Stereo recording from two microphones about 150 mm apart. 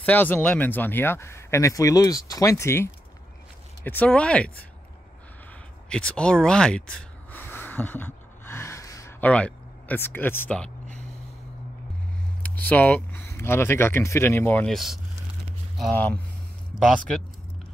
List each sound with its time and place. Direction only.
0.0 s speech: 10° left (ahead or behind)
5.9 s speech: 5° left (ahead or behind)
7.2 s gasp: 15° left (ahead or behind)
9.2 s speech: 10° left (ahead or behind)
12.4 s speech: 10° left (ahead or behind)
15.9 s speech: 10° left (ahead or behind)